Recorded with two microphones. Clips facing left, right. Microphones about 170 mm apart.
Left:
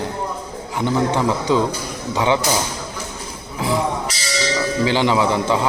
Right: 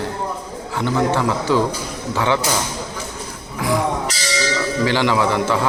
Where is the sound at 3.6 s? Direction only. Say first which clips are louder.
Right 1 dB; 25° left (ahead or behind).